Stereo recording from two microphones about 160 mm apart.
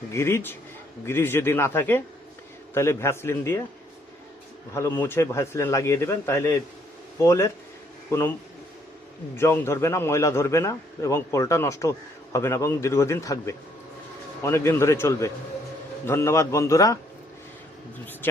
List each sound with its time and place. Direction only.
0.1 s a man's voice: 15° left (ahead or behind)
4.7 s a man's voice: 15° left (ahead or behind)
9.3 s a man's voice: 15° left (ahead or behind)